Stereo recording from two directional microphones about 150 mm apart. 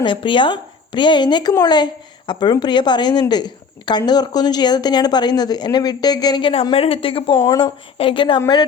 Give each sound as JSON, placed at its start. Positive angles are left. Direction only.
{"t": 0.0, "sound": "a woman's voice", "side_deg": 30}
{"t": 7.3, "sound": "a woman's voice", "side_deg": 20}
{"t": 7.9, "sound": "a woman's voice", "side_deg": 35}